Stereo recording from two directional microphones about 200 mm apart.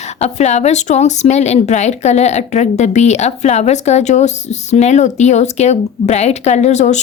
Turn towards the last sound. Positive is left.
turn(degrees=35)  # may be behind; listen again after turning